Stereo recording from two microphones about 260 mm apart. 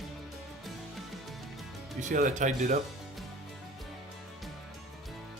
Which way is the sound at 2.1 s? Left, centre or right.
Right.